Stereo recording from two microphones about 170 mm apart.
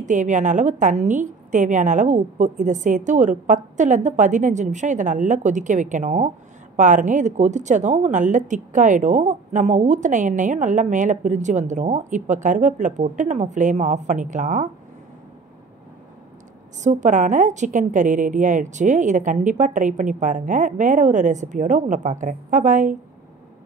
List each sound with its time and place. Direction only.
0.0 s a woman's voice: 45° right (ahead or behind)
16.8 s a woman's voice: 45° right (ahead or behind)